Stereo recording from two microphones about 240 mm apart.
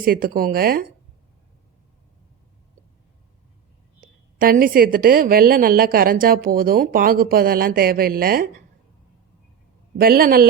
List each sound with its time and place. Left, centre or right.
0.0 s a woman's voice: right
4.0 s a woman's voice: right
10.0 s a woman's voice: right